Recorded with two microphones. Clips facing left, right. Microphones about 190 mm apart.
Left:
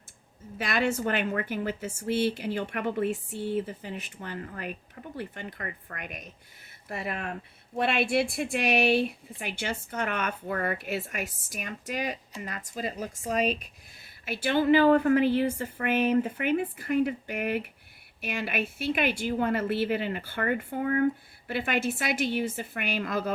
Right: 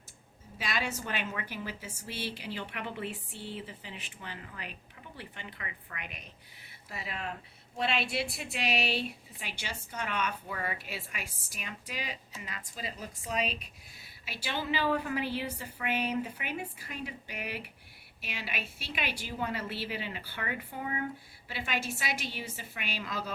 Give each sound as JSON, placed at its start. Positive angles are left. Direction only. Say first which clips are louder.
{"t": 0.6, "sound": "a woman's voice", "louder": "left 8 dB", "side_deg": 55}